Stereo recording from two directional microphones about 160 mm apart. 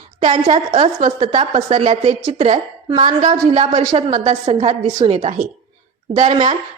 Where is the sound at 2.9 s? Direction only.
25° right (ahead or behind).